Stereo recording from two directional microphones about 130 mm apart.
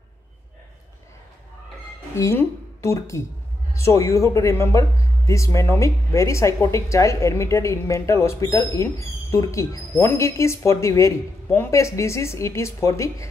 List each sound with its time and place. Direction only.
2.1 s speech: 20° left (ahead or behind)